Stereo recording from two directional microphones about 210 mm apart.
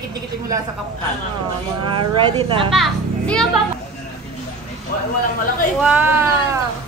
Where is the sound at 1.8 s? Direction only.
25° right (ahead or behind).